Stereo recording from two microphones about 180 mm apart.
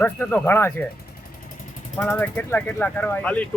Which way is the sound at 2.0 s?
10° left (ahead or behind).